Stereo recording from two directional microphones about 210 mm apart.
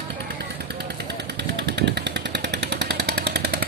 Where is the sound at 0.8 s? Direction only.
55° right (ahead or behind).